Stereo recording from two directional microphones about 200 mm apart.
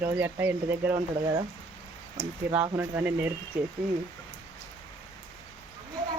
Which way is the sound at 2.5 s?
10° right (ahead or behind).